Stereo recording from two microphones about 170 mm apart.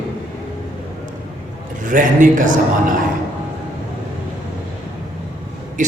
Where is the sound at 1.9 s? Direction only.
50° right (ahead or behind).